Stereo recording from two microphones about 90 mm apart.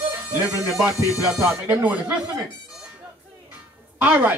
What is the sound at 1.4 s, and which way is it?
Speech, 15° right (ahead or behind).